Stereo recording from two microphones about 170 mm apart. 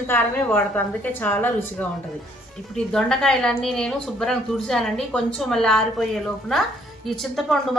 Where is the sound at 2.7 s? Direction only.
5° left (ahead or behind).